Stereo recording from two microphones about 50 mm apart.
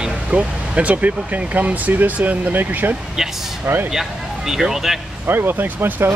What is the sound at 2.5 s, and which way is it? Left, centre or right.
Speech, right.